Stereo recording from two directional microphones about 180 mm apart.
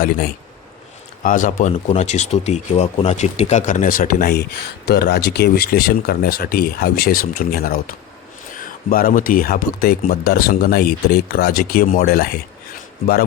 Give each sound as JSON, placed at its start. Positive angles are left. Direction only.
{"t": 1.2, "sound": "speech", "side_deg": 50}